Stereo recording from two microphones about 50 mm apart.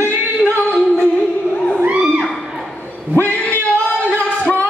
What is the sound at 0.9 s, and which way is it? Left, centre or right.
Music, left.